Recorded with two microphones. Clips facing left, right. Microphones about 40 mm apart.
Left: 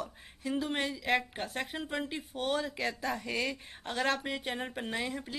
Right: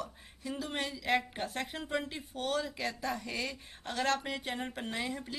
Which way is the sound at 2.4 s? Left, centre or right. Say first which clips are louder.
Left 1 dB; centre.